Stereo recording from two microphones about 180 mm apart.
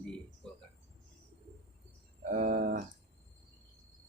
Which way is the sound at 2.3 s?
50° right (ahead or behind).